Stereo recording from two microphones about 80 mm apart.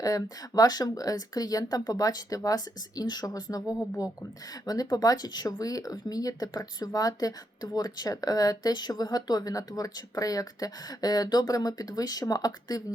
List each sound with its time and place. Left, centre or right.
0.0 s speech: left